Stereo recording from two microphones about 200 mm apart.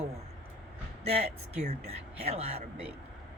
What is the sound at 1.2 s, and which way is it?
Speech, 30° right (ahead or behind).